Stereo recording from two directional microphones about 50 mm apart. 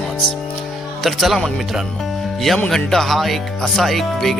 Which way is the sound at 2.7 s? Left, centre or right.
Centre.